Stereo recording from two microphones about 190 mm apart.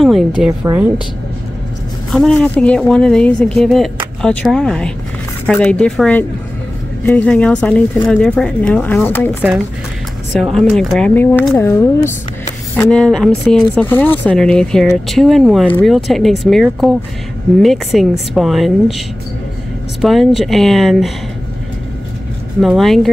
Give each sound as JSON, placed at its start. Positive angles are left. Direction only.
{"t": 0.0, "sound": "a sound", "side_deg": 0}
{"t": 0.5, "sound": "speech", "side_deg": -15}
{"t": 2.0, "sound": "speech", "side_deg": 5}
{"t": 10.5, "sound": "speech", "side_deg": 0}
{"t": 22.6, "sound": "speech", "side_deg": 0}